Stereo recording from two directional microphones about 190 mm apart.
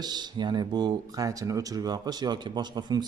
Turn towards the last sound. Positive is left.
turn(degrees=-20)  # may be behind; listen again after turning